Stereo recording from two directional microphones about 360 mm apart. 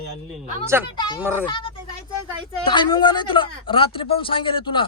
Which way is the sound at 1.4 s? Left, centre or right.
Centre.